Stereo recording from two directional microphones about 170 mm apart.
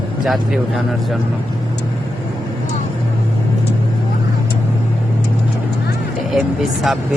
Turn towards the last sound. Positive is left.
turn(degrees=0)  # may be behind; listen again after turning